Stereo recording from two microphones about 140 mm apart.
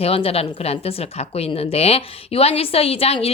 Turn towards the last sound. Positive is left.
turn(degrees=45)  # may be behind; listen again after turning